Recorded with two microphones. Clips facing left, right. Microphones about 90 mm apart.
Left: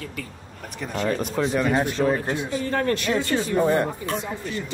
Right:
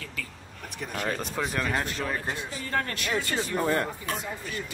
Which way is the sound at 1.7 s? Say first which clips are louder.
Left 8 dB; 25° left (ahead or behind).